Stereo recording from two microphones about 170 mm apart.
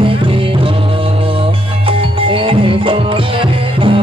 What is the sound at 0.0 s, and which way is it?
Music, 30° right (ahead or behind).